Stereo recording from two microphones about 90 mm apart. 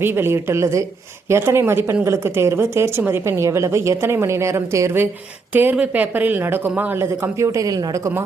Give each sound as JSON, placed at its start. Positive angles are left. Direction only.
{"t": 0.0, "sound": "a woman's voice", "side_deg": -25}
{"t": 5.7, "sound": "speech", "side_deg": -15}
{"t": 7.3, "sound": "a woman's voice", "side_deg": -35}